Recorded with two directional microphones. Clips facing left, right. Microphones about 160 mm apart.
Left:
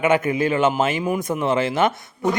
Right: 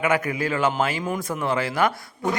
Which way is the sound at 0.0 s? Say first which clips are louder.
Left 4 dB; 25° left (ahead or behind).